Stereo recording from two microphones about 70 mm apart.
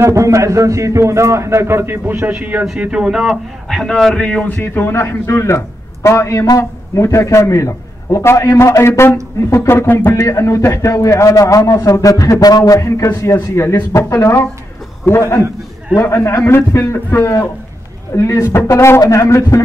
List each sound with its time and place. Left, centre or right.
0.0 s a man's voice: right
2.8 s speech: centre
3.6 s speech: centre
4.6 s a man's voice: left